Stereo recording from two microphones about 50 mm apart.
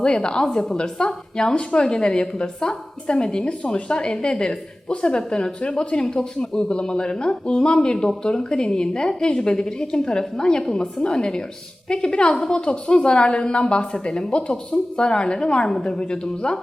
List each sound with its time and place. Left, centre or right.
0.0 s a woman's voice: centre